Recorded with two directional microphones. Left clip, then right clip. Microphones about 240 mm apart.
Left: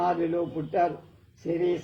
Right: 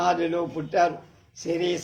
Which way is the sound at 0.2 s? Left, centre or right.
Right.